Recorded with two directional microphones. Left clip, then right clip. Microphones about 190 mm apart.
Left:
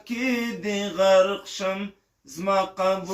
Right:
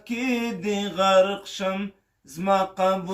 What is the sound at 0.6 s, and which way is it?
Chant, 60° right (ahead or behind).